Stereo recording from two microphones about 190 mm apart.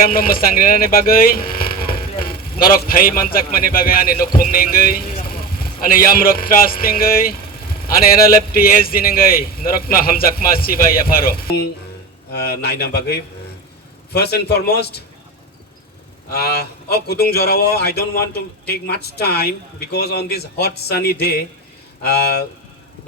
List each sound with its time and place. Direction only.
0.0 s a man's voice: 50° left (ahead or behind)
16.3 s speech: 55° left (ahead or behind)